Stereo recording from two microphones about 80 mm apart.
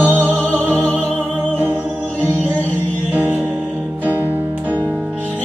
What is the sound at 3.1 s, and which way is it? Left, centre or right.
Music, centre.